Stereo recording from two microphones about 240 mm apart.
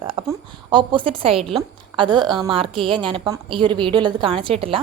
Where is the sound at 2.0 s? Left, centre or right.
Centre.